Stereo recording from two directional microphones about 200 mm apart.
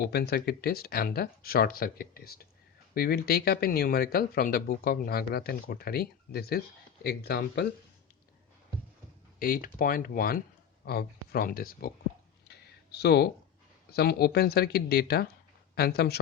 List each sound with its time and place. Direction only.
0.0 s speech: 50° left (ahead or behind)
9.4 s speech: 45° left (ahead or behind)
12.5 s a sound: 55° left (ahead or behind)
13.9 s speech: 50° left (ahead or behind)